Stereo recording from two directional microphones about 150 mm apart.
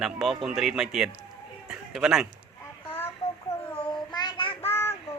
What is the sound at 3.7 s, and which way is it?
Child singing, 30° left (ahead or behind).